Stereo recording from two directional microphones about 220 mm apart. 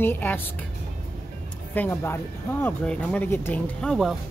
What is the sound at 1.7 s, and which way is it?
Speech, 10° left (ahead or behind).